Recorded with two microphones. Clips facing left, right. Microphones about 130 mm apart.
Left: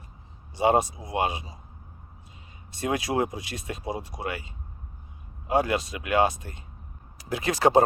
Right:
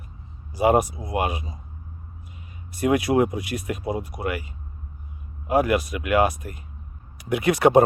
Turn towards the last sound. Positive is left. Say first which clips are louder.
# right 4 dB
turn(degrees=25)  # may be behind; listen again after turning